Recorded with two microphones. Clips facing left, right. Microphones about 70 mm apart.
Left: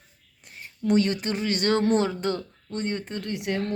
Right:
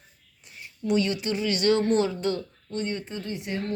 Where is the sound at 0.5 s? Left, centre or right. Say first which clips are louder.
Left 3 dB; left.